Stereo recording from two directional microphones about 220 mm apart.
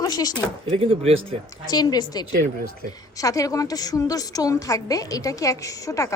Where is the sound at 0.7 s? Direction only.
25° right (ahead or behind).